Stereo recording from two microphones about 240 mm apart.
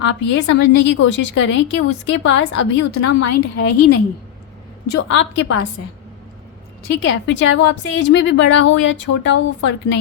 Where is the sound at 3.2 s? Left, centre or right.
Left.